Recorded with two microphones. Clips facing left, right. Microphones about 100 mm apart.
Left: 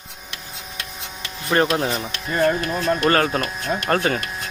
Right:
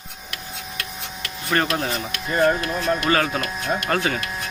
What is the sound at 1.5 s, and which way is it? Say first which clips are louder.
Speech: left 3 dB; 20° left (ahead or behind).